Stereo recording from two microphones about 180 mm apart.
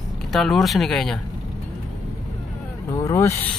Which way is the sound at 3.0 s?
15° left (ahead or behind).